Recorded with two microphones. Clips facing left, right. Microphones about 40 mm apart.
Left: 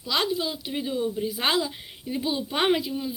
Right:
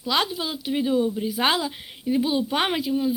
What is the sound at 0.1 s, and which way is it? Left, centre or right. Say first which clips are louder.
Speech: right 2 dB; right.